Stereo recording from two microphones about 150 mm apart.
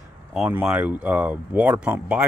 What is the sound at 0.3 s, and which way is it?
Speech, 5° right (ahead or behind).